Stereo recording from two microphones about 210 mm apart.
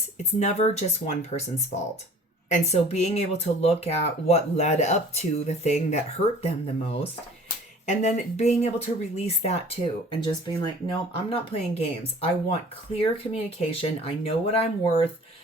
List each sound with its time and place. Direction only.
0.3 s speech: 30° left (ahead or behind)